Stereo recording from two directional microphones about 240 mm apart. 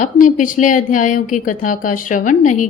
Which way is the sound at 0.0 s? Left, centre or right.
Left.